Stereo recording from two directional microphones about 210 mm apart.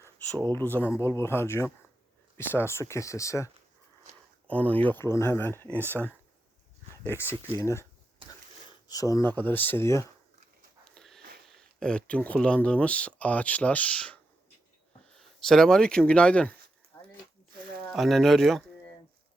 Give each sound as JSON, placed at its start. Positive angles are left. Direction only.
{"t": 0.4, "sound": "speech", "side_deg": 10}
{"t": 7.5, "sound": "speech", "side_deg": 15}
{"t": 8.2, "sound": "a sound", "side_deg": -25}
{"t": 8.9, "sound": "speech", "side_deg": 15}
{"t": 10.8, "sound": "sniff", "side_deg": 0}
{"t": 11.4, "sound": "speech", "side_deg": 5}
{"t": 17.9, "sound": "speech", "side_deg": 0}